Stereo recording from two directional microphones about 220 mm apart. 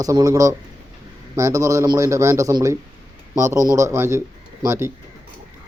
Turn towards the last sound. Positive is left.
turn(degrees=-10)  # may be behind; listen again after turning